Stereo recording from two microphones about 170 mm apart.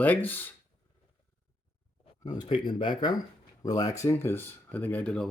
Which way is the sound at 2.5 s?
30° left (ahead or behind).